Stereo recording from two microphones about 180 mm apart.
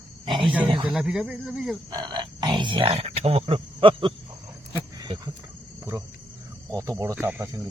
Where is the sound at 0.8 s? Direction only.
5° right (ahead or behind).